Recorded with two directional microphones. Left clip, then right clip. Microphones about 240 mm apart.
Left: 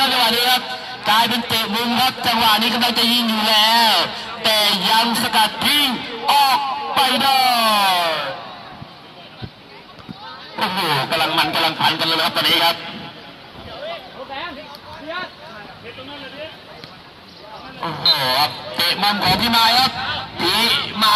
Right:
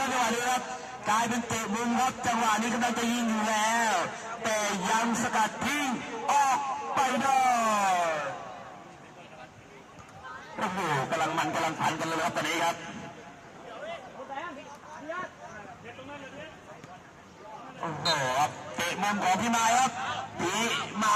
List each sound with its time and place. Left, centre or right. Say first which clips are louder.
0.0 s vehicle: left 12 dB; left
1.0 s a man's voice: left 11 dB; left
10.6 s honk: left 10 dB; left
17.8 s speech: left 11 dB; left